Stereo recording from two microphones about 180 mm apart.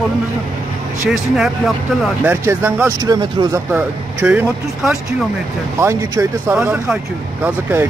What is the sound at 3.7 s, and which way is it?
Speech, 10° right (ahead or behind).